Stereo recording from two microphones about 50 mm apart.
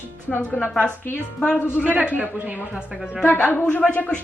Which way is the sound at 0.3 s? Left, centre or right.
Left.